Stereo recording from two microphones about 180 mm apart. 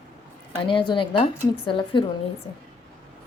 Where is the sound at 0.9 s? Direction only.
25° left (ahead or behind).